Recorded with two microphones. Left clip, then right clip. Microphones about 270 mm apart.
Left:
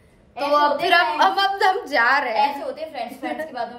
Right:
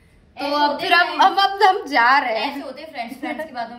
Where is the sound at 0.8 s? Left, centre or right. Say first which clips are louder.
Right 1 dB; centre.